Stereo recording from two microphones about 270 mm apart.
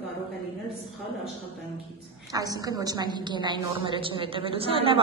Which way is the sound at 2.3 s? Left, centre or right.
Centre.